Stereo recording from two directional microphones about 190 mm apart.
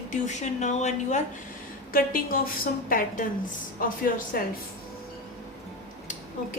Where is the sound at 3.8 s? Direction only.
45° left (ahead or behind).